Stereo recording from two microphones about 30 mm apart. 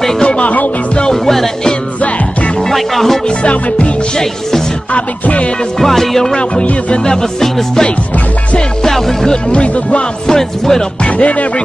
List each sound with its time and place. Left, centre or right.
0.4 s music: left
1.1 s music: centre
2.7 s music: centre
4.2 s music: centre
5.2 s music: left
5.8 s music: centre
7.1 s speech: left
8.8 s music: centre
9.5 s speech: left
10.2 s speech: centre
11.1 s music: left